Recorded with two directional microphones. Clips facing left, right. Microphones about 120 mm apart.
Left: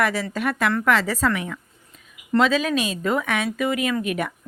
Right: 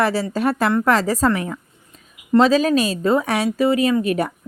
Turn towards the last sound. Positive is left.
turn(degrees=-35)  # may be behind; listen again after turning